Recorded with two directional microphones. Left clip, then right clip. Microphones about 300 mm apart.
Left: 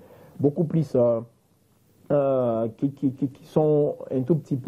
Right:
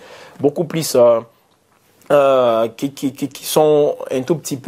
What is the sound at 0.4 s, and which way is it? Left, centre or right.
Speech, right.